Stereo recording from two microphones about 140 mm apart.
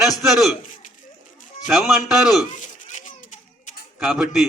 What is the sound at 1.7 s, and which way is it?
Speech, 5° right (ahead or behind).